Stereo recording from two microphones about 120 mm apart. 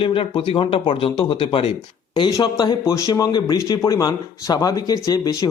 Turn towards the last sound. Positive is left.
turn(degrees=30)  # may be behind; listen again after turning